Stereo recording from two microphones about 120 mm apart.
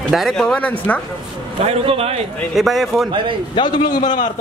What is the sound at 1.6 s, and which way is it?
Speech, 60° right (ahead or behind).